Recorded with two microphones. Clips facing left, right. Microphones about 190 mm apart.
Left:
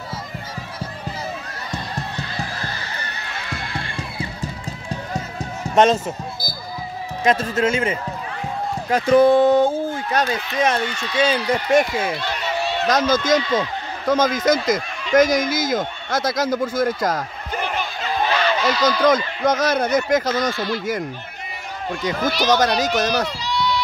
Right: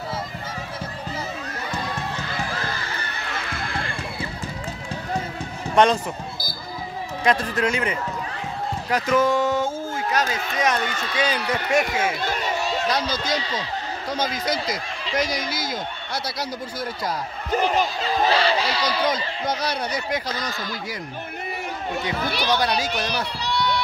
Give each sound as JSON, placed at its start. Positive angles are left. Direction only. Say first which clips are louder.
{"t": 6.4, "sound": "speech", "louder": "left 3 dB", "side_deg": -30}
{"t": 7.2, "sound": "speech", "louder": "left 3 dB", "side_deg": 25}
{"t": 8.9, "sound": "a sound", "louder": "left 7 dB", "side_deg": 35}
{"t": 10.6, "sound": "speech", "louder": "left 3 dB", "side_deg": 25}
{"t": 12.2, "sound": "a sound", "louder": "left 1 dB", "side_deg": -45}
{"t": 12.8, "sound": "a man's voice", "louder": "left 6 dB", "side_deg": 45}
{"t": 17.6, "sound": "a sound", "louder": "right 4 dB", "side_deg": -35}
{"t": 19.0, "sound": "a man's voice", "louder": "left 7 dB", "side_deg": 45}
{"t": 22.5, "sound": "a man's voice", "louder": "left 5 dB", "side_deg": 45}
{"t": 23.4, "sound": "run", "louder": "left 1 dB", "side_deg": -60}